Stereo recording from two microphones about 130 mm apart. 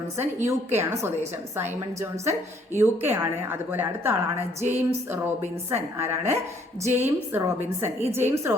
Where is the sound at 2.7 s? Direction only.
15° right (ahead or behind).